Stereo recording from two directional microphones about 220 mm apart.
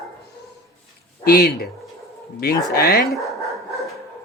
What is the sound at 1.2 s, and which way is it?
Speech, 45° left (ahead or behind).